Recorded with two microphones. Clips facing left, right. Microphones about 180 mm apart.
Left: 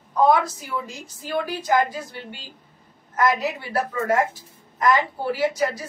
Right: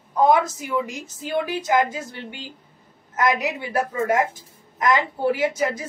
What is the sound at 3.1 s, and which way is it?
A woman's voice, 20° right (ahead or behind).